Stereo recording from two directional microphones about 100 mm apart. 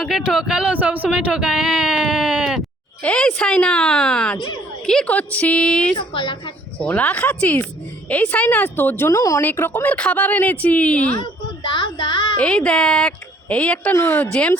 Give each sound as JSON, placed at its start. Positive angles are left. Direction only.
{"t": 0.0, "sound": "speech", "side_deg": -5}
{"t": 3.0, "sound": "a woman's voice", "side_deg": 10}
{"t": 9.4, "sound": "speech", "side_deg": 20}
{"t": 11.7, "sound": "speech", "side_deg": 55}
{"t": 12.4, "sound": "speech", "side_deg": 10}